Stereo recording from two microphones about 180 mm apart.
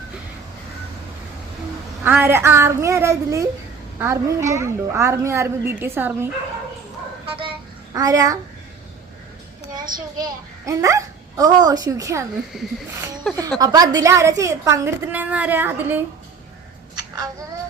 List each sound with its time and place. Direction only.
2.0 s a woman's voice: 10° right (ahead or behind)
7.9 s a child's voice: 20° right (ahead or behind)
9.9 s a child's voice: 50° right (ahead or behind)
10.7 s a woman's voice: 15° right (ahead or behind)
12.5 s speech: 5° right (ahead or behind)
13.6 s a woman's voice: 20° right (ahead or behind)
16.9 s child singing: 20° right (ahead or behind)